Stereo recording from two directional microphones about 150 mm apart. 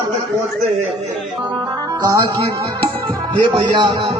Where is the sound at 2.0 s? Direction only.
25° right (ahead or behind).